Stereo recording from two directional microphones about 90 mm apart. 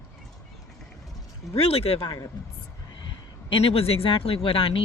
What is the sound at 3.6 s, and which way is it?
Speech, 90° left.